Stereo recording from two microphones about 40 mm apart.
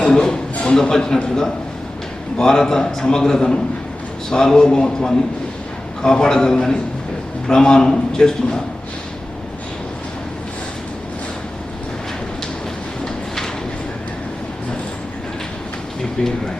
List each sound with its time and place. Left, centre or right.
0.1 s a man's voice: centre